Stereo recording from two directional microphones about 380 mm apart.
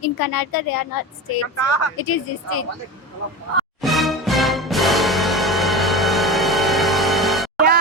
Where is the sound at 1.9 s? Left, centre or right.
Left.